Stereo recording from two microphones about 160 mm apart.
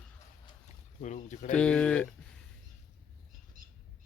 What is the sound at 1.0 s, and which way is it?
Speech, 50° left (ahead or behind).